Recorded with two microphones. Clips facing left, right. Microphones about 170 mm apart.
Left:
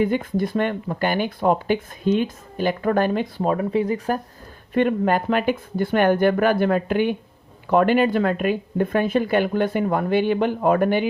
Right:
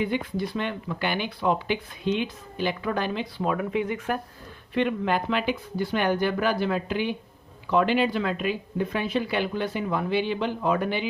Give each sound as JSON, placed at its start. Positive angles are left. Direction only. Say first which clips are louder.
{"t": 0.0, "sound": "speech", "louder": "left 6 dB", "side_deg": 45}